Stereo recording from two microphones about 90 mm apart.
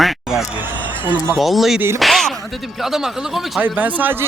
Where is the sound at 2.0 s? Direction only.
5° left (ahead or behind).